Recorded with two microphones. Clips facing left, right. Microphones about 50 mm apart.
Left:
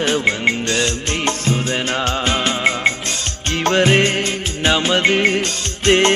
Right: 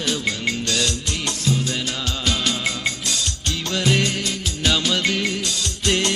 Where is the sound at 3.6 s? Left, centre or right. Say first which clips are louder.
Left 7 dB; left.